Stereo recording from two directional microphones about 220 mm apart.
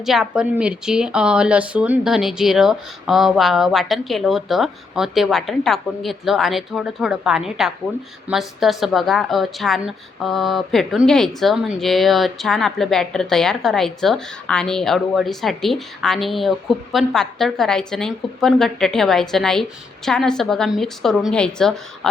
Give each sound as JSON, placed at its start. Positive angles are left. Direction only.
{"t": 0.0, "sound": "a woman's voice", "side_deg": 0}